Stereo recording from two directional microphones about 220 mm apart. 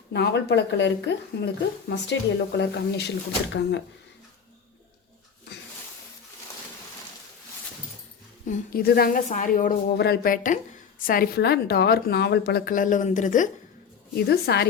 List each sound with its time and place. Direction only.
0.1 s a woman's voice: 50° left (ahead or behind)
8.4 s a woman's voice: 40° left (ahead or behind)
14.2 s a woman's voice: 45° left (ahead or behind)